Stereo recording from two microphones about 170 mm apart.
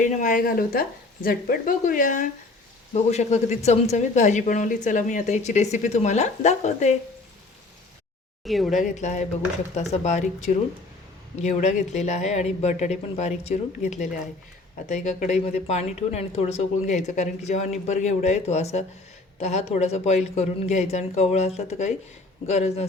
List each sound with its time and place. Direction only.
0.0 s speech: 50° left (ahead or behind)
8.4 s speech: centre (ahead or behind)
8.8 s speech: 45° left (ahead or behind)